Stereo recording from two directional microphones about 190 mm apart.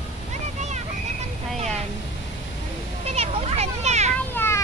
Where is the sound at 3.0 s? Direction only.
30° right (ahead or behind).